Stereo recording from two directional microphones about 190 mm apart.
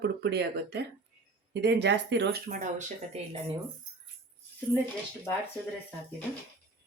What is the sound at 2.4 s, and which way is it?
Speech, 40° right (ahead or behind).